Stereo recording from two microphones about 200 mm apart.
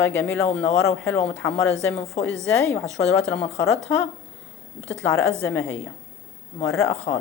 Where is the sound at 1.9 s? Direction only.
30° left (ahead or behind).